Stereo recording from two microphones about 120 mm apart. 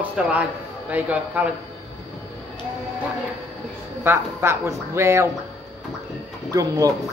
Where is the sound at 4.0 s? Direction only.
20° right (ahead or behind).